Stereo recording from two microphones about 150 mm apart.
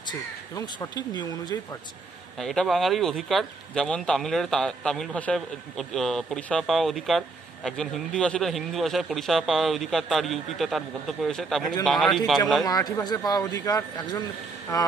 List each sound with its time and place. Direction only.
0.1 s speech: 30° left (ahead or behind)
2.3 s a man's voice: centre (ahead or behind)
12.6 s speech: 25° left (ahead or behind)